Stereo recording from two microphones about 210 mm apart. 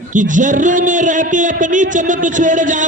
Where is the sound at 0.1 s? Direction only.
35° right (ahead or behind).